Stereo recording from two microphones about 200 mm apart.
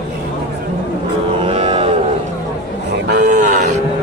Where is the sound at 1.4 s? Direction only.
30° right (ahead or behind).